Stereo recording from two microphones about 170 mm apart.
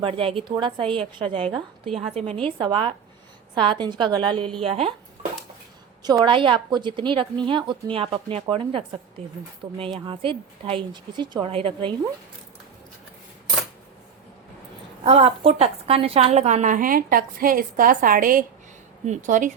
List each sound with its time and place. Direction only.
0.0 s a woman's voice: 35° right (ahead or behind)
6.2 s a woman's voice: 30° right (ahead or behind)
9.6 s a woman's voice: 25° right (ahead or behind)
15.0 s a woman's voice: 35° right (ahead or behind)